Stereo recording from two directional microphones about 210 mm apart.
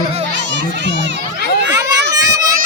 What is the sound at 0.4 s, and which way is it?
Crowd, 55° right (ahead or behind).